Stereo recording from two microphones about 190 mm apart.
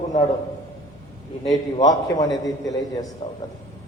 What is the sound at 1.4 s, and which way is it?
A man's voice, 25° left (ahead or behind).